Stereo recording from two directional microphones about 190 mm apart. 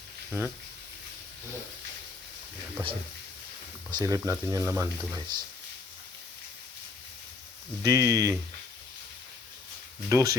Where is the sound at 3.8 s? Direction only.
20° right (ahead or behind).